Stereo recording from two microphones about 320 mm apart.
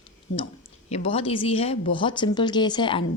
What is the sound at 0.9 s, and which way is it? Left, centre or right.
Speech, centre.